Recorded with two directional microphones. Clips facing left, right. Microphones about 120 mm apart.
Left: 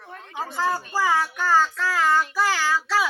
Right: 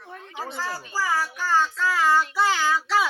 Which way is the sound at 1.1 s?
60° left (ahead or behind).